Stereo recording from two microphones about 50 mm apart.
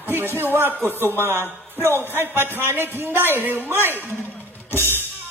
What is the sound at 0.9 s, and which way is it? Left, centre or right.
Speech, left.